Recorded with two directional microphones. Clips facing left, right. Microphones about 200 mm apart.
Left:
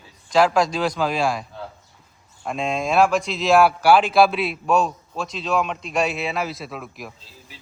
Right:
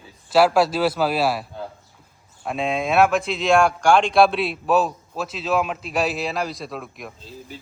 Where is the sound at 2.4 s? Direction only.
Centre (ahead or behind).